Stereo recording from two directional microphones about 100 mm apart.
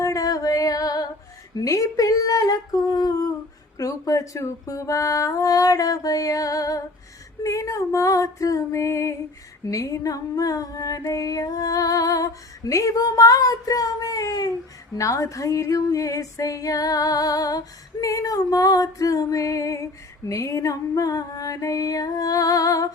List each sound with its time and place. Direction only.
0.0 s music: 35° left (ahead or behind)
1.5 s female singing: 35° left (ahead or behind)